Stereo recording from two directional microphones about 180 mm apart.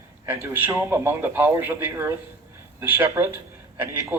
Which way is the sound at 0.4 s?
10° right (ahead or behind).